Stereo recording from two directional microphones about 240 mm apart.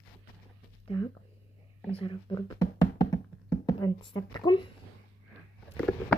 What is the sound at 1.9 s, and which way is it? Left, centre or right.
Speech, left.